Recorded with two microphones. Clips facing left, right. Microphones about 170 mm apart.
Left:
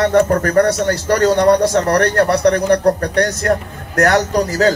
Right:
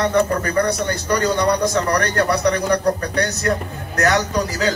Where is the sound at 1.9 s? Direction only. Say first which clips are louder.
Left 5 dB; 65° left (ahead or behind).